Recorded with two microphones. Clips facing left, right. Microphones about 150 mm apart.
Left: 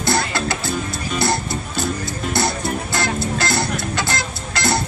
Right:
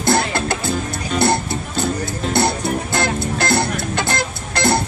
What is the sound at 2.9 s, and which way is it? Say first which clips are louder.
Music: right 2 dB; 55° right (ahead or behind).